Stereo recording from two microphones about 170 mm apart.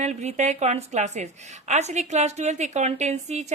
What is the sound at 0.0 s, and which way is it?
A woman's voice, 40° right (ahead or behind).